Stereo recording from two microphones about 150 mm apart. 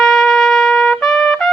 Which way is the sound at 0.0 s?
Centre (ahead or behind).